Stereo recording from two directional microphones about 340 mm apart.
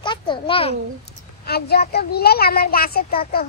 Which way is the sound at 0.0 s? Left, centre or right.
Centre.